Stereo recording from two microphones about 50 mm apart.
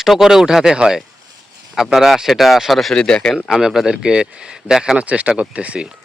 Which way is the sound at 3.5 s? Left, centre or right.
Centre.